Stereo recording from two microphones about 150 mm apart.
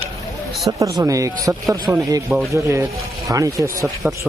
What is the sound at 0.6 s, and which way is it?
Speech, 25° right (ahead or behind).